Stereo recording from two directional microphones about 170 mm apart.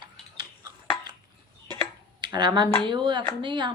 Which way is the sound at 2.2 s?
25° right (ahead or behind).